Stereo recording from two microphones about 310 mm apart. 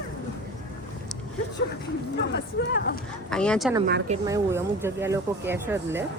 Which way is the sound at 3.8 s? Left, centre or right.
Right.